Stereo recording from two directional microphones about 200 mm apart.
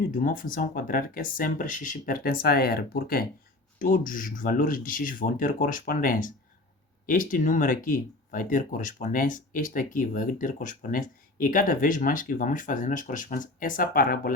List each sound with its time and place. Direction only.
0.1 s speech: 45° left (ahead or behind)